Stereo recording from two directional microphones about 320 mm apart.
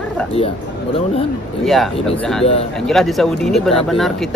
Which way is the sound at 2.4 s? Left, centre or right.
Centre.